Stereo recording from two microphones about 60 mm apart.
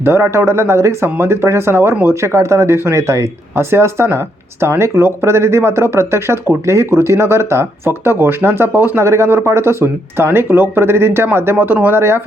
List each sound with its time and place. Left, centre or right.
0.0 s speech: right